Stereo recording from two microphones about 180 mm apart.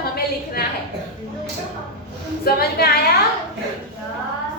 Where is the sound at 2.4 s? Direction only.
60° left (ahead or behind).